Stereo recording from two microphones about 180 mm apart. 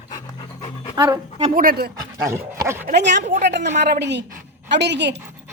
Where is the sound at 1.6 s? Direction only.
55° right (ahead or behind).